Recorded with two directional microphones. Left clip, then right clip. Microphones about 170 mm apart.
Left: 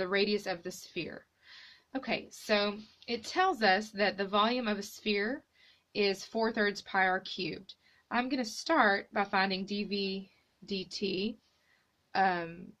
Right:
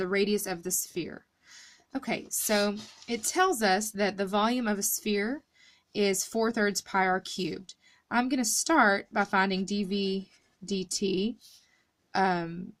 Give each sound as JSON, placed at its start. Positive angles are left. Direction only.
{"t": 0.0, "sound": "a woman's voice", "side_deg": -35}
{"t": 12.1, "sound": "a woman's voice", "side_deg": -45}